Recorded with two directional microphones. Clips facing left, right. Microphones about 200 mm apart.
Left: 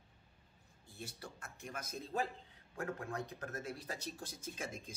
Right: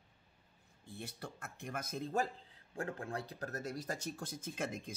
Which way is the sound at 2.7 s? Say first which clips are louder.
Right 1 dB; 30° right (ahead or behind).